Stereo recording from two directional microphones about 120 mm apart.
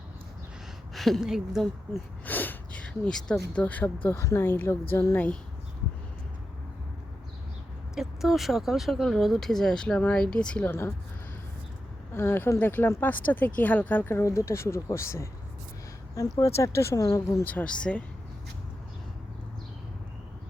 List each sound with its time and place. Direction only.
0.9 s speech: centre (ahead or behind)
1.9 s speech: 15° left (ahead or behind)
5.1 s speech: 10° left (ahead or behind)
7.9 s speech: centre (ahead or behind); by 10.9 s 20° left (ahead or behind)
12.1 s speech: 20° left (ahead or behind)
17.4 s speech: 10° left (ahead or behind)